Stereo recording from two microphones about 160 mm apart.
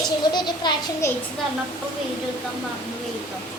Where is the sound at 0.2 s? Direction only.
25° left (ahead or behind).